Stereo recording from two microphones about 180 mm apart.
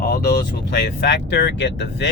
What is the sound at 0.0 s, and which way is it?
Speech, 60° left (ahead or behind).